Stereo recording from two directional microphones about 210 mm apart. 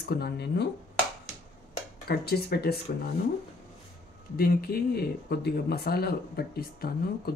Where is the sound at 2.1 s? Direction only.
50° left (ahead or behind).